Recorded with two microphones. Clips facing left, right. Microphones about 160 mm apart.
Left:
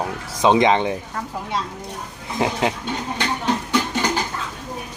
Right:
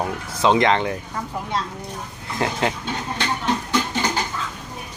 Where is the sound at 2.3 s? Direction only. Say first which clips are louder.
Left 2 dB; 15° left (ahead or behind).